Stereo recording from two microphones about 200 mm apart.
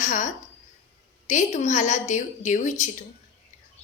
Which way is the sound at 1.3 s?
40° left (ahead or behind).